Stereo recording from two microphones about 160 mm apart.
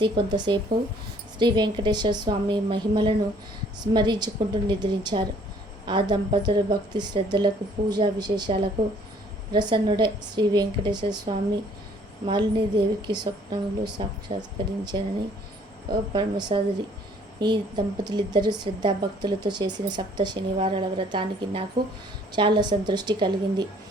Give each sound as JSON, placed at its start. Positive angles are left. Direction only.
{"t": 0.0, "sound": "a woman's voice", "side_deg": -25}
{"t": 16.1, "sound": "a woman's voice", "side_deg": -30}